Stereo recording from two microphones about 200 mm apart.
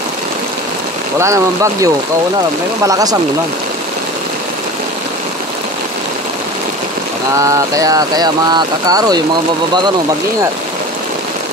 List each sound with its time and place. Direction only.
1.2 s speech: 15° right (ahead or behind)
7.3 s speech: 15° right (ahead or behind)